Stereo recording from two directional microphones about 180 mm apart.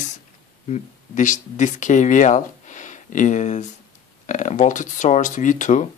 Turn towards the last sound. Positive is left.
turn(degrees=45)  # may be behind; listen again after turning